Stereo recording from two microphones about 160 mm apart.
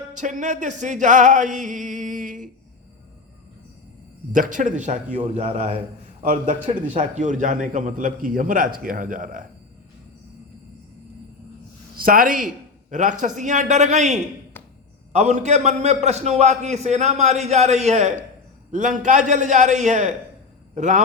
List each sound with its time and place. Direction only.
0.1 s a man's voice: 50° right (ahead or behind)
4.3 s a man's voice: 55° right (ahead or behind); by 5.8 s 35° right (ahead or behind)
6.2 s a man's voice: 50° right (ahead or behind)
12.0 s a man's voice: 60° right (ahead or behind)